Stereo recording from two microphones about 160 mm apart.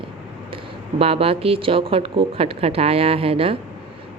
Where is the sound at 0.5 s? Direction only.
35° right (ahead or behind).